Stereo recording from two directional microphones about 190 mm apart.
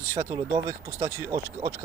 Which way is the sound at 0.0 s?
15° right (ahead or behind).